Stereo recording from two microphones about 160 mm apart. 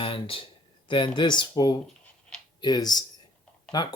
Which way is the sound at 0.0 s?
35° left (ahead or behind).